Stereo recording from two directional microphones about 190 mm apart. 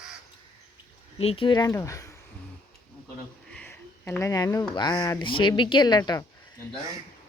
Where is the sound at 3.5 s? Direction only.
10° left (ahead or behind).